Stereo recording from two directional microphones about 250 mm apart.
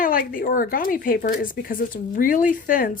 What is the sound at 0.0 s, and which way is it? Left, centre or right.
Speech, left.